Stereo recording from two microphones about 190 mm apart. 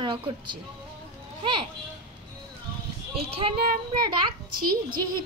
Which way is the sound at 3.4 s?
25° right (ahead or behind).